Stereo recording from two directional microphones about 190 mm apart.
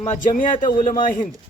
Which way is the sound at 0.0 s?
40° left (ahead or behind).